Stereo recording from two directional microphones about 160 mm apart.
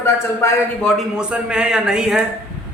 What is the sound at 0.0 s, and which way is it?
Speech, 15° left (ahead or behind).